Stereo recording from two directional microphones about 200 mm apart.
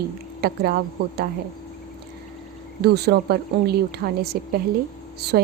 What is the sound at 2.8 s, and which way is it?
A woman's voice, 55° right (ahead or behind).